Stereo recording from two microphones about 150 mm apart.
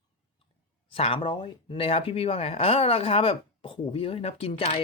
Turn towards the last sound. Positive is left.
turn(degrees=40)  # may be behind; listen again after turning